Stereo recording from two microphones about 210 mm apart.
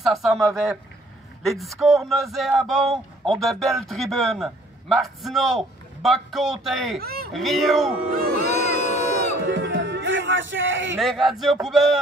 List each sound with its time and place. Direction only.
0.0 s speech: centre (ahead or behind)
7.0 s speech: 45° right (ahead or behind)
7.3 s speech: centre (ahead or behind)
8.1 s speech: 45° right (ahead or behind)
8.5 s crowd: 35° left (ahead or behind)
9.5 s music: 60° right (ahead or behind)
11.0 s speech: centre (ahead or behind)